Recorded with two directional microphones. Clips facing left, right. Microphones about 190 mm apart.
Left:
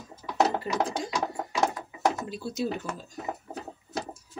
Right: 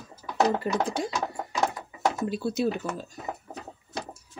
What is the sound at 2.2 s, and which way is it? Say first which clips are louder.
Speech: right 6 dB; 60° right (ahead or behind).